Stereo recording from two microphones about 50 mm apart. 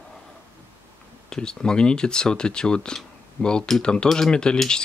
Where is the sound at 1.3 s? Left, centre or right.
Centre.